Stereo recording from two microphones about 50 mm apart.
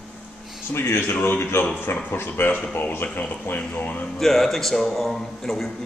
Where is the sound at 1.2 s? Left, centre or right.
Left.